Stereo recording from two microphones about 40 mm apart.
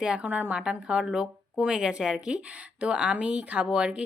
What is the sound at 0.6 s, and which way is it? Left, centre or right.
Speech, right.